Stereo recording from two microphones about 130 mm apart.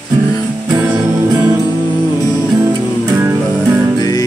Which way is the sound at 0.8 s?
20° right (ahead or behind).